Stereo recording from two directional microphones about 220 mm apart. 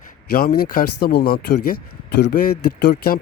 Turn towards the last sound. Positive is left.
turn(degrees=40)  # may be behind; listen again after turning